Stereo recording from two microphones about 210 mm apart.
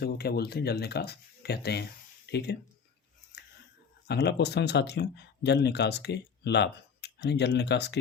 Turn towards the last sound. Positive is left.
turn(degrees=55)  # may be behind; listen again after turning